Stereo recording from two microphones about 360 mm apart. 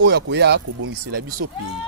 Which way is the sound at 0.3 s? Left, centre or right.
Right.